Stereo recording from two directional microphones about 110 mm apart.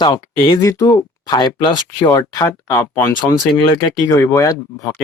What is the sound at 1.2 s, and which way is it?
Speech, 45° left (ahead or behind).